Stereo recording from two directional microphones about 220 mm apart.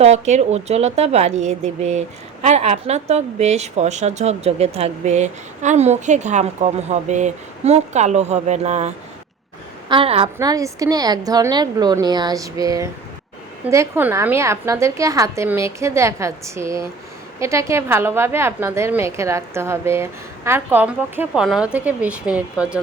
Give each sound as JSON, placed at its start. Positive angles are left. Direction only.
{"t": 0.0, "sound": "speech", "side_deg": -30}
{"t": 9.9, "sound": "a woman's voice", "side_deg": -25}